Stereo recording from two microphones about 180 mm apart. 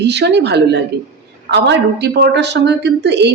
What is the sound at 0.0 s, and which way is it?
A woman's voice, 70° right (ahead or behind).